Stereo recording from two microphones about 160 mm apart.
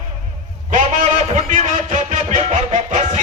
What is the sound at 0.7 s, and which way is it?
A man's voice, 50° right (ahead or behind).